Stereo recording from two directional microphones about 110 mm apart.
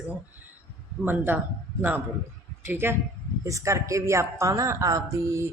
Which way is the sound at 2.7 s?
20° right (ahead or behind).